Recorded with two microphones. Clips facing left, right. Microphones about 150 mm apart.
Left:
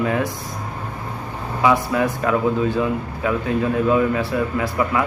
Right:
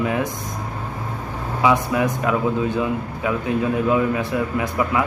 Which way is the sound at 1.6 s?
15° right (ahead or behind).